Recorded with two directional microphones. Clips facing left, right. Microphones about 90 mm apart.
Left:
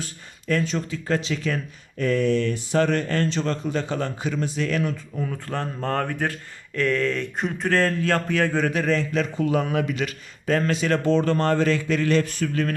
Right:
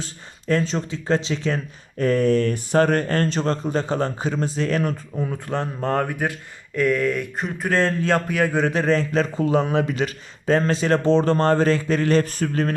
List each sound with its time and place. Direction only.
0.0 s speech: 30° right (ahead or behind)
5.1 s speech: 20° right (ahead or behind)
7.3 s a sound: centre (ahead or behind)
7.7 s speech: 20° right (ahead or behind)
8.7 s speech: 35° right (ahead or behind)